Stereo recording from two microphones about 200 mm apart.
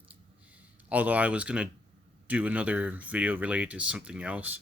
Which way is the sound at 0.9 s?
5° right (ahead or behind).